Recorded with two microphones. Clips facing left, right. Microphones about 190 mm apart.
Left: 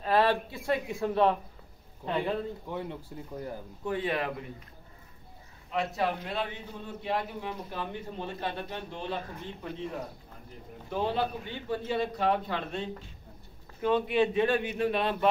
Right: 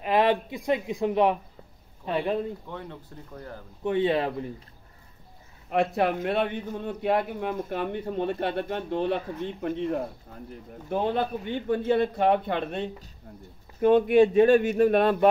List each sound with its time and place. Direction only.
0.0 s speech: 15° right (ahead or behind)
2.7 s speech: 15° left (ahead or behind)
3.8 s a man's voice: 25° right (ahead or behind)
5.7 s a man's voice: 55° right (ahead or behind)